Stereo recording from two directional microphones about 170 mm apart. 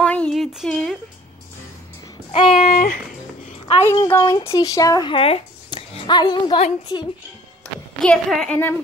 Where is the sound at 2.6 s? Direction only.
60° left (ahead or behind).